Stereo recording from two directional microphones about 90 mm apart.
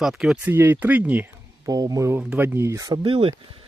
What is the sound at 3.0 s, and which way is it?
Speech, 90° right.